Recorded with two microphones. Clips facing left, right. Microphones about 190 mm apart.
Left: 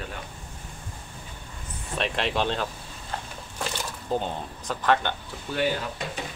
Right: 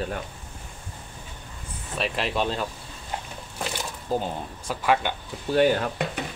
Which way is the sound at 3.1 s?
15° right (ahead or behind).